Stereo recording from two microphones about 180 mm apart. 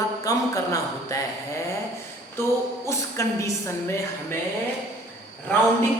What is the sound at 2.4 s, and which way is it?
Speech, 15° left (ahead or behind).